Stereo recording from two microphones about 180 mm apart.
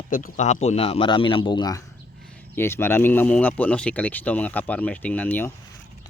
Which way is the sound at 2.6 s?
15° left (ahead or behind).